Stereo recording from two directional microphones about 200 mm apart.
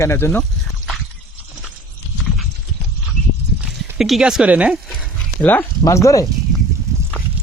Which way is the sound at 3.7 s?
Centre (ahead or behind).